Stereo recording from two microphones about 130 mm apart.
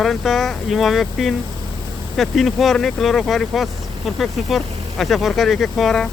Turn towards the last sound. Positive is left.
turn(degrees=0)  # may be behind; listen again after turning